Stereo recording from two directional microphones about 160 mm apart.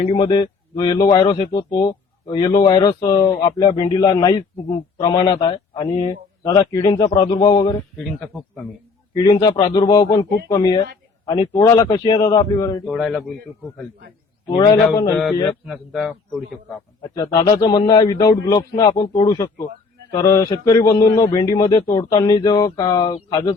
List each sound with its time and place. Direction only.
0.0 s a man's voice: 25° left (ahead or behind)
8.3 s speech: centre (ahead or behind)
9.1 s a man's voice: 25° left (ahead or behind)
12.9 s speech: centre (ahead or behind)
14.5 s a man's voice: 35° left (ahead or behind)
15.1 s speech: 10° left (ahead or behind)
15.6 s speech: 5° right (ahead or behind)
17.0 s a man's voice: 25° left (ahead or behind)